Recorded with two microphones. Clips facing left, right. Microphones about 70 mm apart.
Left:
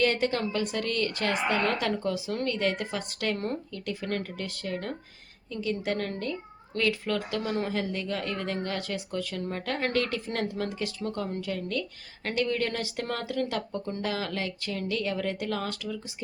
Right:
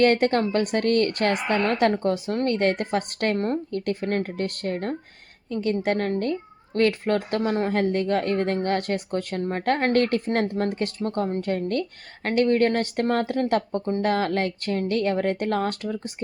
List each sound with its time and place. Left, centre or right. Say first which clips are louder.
0.0 s a woman's voice: right 7 dB; right
3.7 s a woman's voice: right 7 dB; right
7.7 s a woman's voice: right 8 dB; right